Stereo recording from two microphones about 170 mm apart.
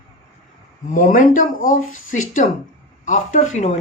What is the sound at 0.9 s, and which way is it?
Speech, 50° left (ahead or behind).